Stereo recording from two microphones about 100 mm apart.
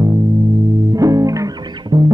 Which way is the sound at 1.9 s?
50° right (ahead or behind).